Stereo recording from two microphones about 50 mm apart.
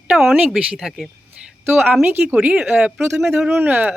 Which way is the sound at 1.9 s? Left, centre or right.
Right.